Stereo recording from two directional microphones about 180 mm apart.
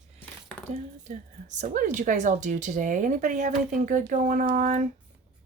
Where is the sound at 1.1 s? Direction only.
40° right (ahead or behind).